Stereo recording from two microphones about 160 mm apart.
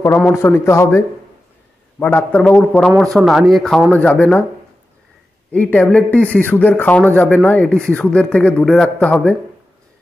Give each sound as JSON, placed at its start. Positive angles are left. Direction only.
{"t": 0.3, "sound": "a man's voice", "side_deg": 15}
{"t": 5.5, "sound": "a man's voice", "side_deg": 5}